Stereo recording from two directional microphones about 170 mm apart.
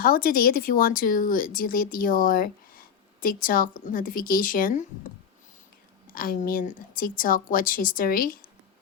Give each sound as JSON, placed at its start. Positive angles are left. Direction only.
{"t": 0.0, "sound": "speech", "side_deg": 60}
{"t": 6.1, "sound": "speech", "side_deg": 55}